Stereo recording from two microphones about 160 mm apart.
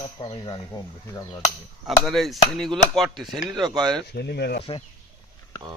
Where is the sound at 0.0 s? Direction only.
30° left (ahead or behind).